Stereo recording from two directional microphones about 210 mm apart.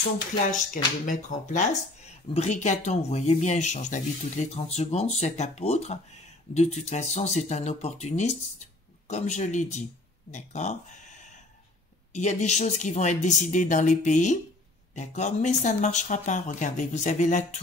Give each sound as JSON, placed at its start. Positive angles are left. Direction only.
{"t": 0.5, "sound": "speech", "side_deg": 40}